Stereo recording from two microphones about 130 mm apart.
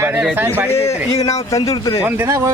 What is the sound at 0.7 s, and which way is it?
Speech, 20° left (ahead or behind).